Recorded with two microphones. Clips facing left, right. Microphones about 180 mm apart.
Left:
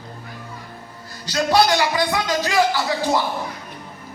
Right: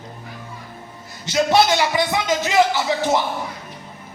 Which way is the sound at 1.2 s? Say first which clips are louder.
Right 1 dB; 20° right (ahead or behind).